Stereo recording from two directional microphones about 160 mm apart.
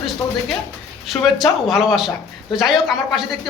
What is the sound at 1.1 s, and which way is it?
Speech, centre (ahead or behind).